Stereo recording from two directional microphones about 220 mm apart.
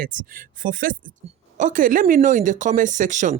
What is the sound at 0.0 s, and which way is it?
Speech, 40° right (ahead or behind).